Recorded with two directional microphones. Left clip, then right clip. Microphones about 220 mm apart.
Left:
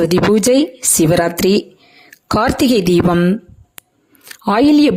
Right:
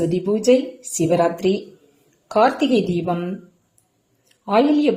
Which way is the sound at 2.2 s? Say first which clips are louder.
Left 2 dB; 50° left (ahead or behind).